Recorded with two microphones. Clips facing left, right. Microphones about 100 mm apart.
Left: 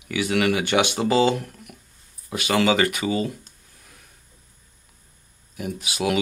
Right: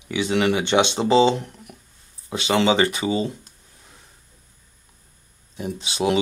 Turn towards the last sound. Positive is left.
turn(degrees=-25)  # may be behind; listen again after turning